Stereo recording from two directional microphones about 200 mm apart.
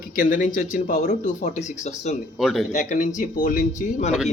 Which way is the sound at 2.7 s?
40° left (ahead or behind).